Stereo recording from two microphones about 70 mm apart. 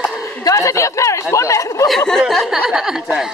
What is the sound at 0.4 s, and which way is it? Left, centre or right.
Speech, left.